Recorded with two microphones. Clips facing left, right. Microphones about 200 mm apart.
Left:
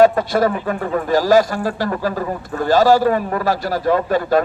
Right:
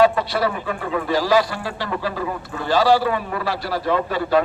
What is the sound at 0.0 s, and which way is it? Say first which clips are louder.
A man's voice: left 4 dB; 45° left (ahead or behind).